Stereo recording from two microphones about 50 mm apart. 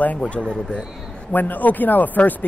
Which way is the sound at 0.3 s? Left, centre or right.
Left.